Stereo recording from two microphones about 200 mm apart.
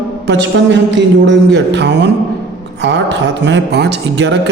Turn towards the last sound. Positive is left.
turn(degrees=-60)  # may be behind; listen again after turning